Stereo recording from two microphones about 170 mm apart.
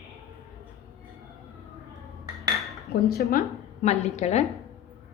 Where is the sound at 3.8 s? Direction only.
40° left (ahead or behind).